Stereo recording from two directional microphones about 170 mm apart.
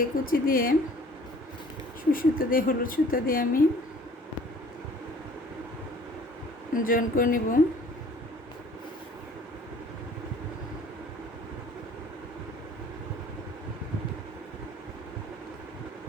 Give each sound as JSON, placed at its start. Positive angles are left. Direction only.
{"t": 0.0, "sound": "a woman's voice", "side_deg": 55}
{"t": 2.1, "sound": "a woman's voice", "side_deg": 55}
{"t": 6.7, "sound": "speech", "side_deg": 55}